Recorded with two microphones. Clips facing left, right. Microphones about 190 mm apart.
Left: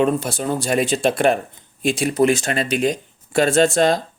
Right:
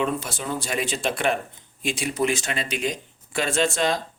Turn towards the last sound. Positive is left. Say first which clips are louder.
# left 7 dB
turn(degrees=40)  # may be behind; listen again after turning